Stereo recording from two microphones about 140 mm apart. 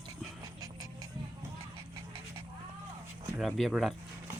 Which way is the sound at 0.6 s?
25° right (ahead or behind).